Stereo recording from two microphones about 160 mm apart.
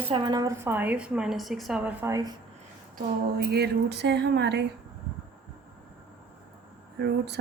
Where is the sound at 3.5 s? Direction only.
90° right.